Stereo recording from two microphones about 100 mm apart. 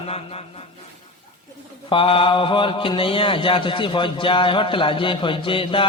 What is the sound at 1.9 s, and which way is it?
Speech, 65° left (ahead or behind).